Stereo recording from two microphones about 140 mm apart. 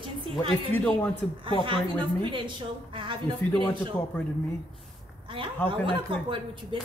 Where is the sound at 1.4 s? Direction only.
40° right (ahead or behind).